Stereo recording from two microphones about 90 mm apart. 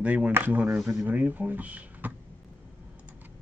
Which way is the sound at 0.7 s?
5° right (ahead or behind).